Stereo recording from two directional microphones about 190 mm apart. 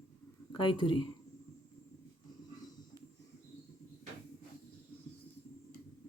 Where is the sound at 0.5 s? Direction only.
25° left (ahead or behind).